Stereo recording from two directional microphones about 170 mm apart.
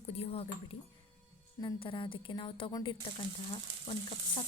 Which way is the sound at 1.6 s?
25° left (ahead or behind).